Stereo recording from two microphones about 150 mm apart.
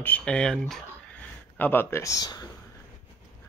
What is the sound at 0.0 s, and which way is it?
Speech, 10° left (ahead or behind).